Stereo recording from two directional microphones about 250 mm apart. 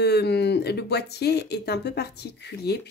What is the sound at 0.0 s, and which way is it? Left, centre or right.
Speech, left.